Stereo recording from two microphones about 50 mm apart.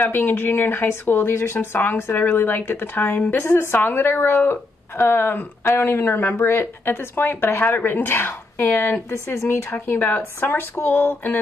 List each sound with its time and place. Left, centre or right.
0.0 s a woman's voice: left
6.3 s a woman's voice: left
9.3 s speech: left
9.8 s a woman's voice: left